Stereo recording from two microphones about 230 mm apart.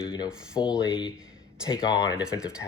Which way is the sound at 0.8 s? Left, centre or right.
Left.